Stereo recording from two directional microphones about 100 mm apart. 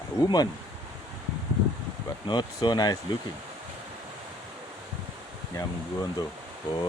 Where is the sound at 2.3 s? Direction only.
50° left (ahead or behind).